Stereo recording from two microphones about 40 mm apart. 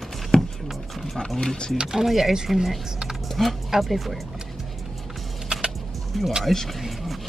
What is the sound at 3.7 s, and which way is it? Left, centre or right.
Speech, centre.